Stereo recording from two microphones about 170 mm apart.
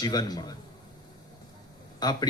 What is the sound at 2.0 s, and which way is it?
Speech, 25° left (ahead or behind).